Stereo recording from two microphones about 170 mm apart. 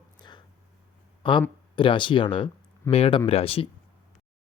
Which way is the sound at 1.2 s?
30° left (ahead or behind).